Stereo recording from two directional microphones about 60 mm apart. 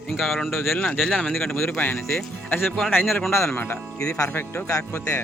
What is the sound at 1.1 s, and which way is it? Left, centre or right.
Speech, centre.